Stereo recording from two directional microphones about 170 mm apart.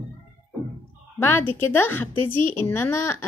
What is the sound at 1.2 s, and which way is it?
A woman's voice, 15° left (ahead or behind).